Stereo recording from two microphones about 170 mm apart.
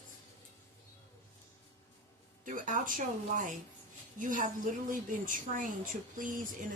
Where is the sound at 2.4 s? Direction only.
50° right (ahead or behind).